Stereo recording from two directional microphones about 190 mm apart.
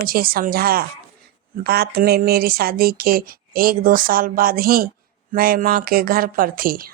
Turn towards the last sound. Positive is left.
turn(degrees=-50)  # may be behind; listen again after turning